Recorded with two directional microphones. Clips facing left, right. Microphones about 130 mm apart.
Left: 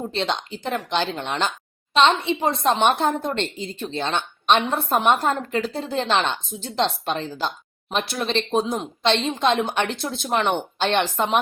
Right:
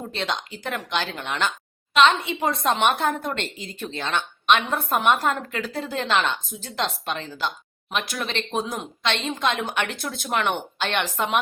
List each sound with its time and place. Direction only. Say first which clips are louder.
0.1 s a woman's voice: left 3 dB; 30° left (ahead or behind)